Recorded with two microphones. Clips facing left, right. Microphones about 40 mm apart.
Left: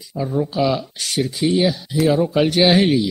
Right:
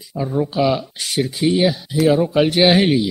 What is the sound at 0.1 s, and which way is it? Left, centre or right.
Speech, centre.